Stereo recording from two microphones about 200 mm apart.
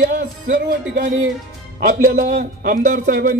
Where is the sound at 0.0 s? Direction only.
40° right (ahead or behind).